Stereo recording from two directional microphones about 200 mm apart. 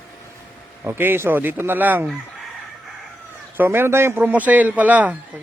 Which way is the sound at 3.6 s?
10° right (ahead or behind).